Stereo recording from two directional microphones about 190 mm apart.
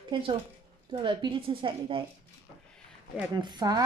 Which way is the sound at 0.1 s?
30° right (ahead or behind).